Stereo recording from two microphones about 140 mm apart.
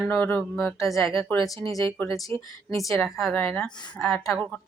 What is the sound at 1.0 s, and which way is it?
Speech, centre (ahead or behind).